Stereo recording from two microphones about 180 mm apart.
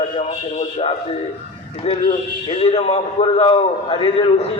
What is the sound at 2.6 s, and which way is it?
A man's voice, 35° left (ahead or behind).